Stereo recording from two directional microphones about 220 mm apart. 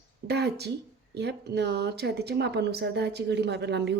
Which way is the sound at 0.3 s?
50° right (ahead or behind).